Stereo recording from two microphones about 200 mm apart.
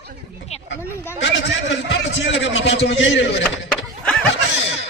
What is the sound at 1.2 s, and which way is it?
A man's voice, 65° left (ahead or behind).